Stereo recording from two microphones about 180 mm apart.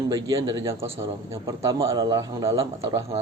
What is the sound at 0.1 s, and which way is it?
A man's voice, 20° right (ahead or behind).